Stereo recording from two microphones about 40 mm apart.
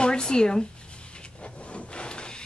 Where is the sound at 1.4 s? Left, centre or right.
Left.